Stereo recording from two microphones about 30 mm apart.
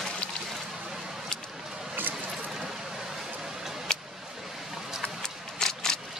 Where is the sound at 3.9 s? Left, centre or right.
Left.